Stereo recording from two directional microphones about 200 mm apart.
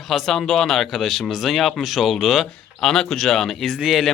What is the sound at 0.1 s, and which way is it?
Speech, centre (ahead or behind).